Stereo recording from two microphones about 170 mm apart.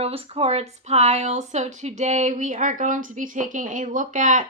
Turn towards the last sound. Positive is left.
turn(degrees=-45)  # may be behind; listen again after turning